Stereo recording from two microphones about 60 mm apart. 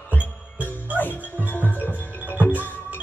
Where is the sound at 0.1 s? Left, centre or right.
Left.